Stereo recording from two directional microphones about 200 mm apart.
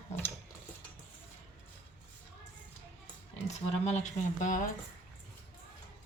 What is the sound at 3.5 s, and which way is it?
Speech, 35° left (ahead or behind).